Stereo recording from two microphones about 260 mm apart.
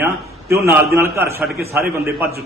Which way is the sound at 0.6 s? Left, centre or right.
Centre.